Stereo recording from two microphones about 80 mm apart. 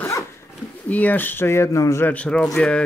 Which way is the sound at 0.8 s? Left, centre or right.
Centre.